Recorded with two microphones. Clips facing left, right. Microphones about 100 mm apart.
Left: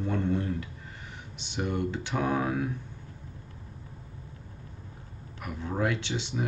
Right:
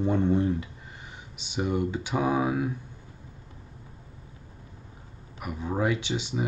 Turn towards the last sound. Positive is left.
turn(degrees=-10)  # may be behind; listen again after turning